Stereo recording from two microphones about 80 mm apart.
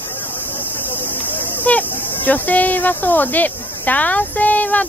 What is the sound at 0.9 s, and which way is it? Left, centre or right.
Speech, left.